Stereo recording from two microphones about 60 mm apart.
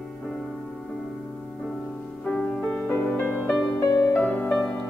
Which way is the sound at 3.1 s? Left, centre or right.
Left.